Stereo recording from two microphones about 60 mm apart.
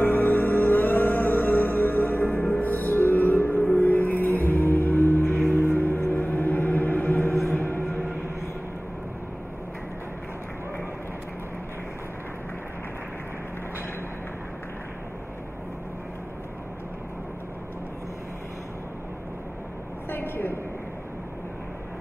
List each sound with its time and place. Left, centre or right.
0.0 s music: left
5.5 s vehicle: left
5.8 s music: left
20.1 s a sound: left